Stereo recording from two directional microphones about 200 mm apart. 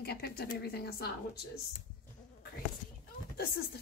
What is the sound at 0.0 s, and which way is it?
A woman's voice, 55° left (ahead or behind).